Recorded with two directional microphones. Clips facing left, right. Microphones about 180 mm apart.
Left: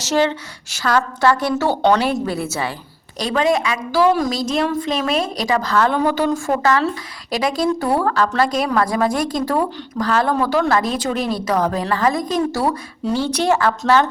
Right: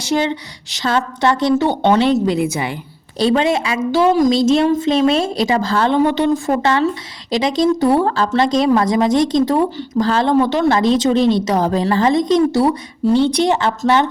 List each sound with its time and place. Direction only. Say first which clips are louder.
0.0 s speech: even; 15° right (ahead or behind)
3.2 s speech: right 3 dB; 30° right (ahead or behind)